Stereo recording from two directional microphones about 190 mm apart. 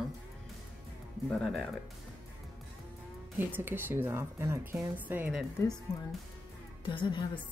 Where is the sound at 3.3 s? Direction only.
10° right (ahead or behind).